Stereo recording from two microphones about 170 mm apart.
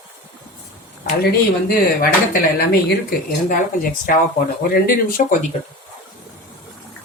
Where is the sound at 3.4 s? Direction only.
55° left (ahead or behind).